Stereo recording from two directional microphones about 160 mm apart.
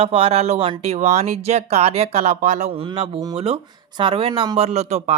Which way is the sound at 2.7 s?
35° right (ahead or behind).